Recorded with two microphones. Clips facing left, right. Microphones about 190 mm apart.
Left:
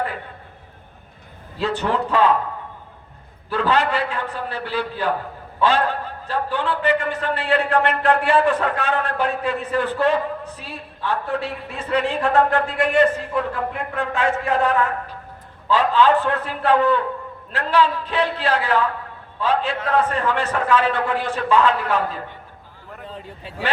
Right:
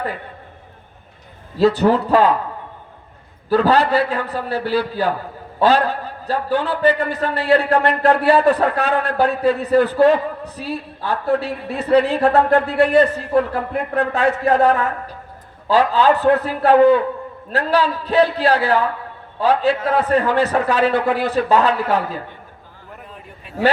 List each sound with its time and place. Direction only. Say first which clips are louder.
1.5 s a man's voice: right 8 dB; 35° right (ahead or behind)
3.5 s a man's voice: right 5 dB; 35° right (ahead or behind)
23.0 s a sound: left 4 dB; 30° left (ahead or behind)